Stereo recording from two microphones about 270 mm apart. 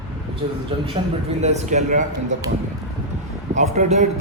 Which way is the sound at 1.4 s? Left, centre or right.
Right.